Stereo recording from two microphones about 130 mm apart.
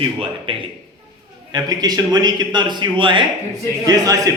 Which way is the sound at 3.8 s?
25° right (ahead or behind).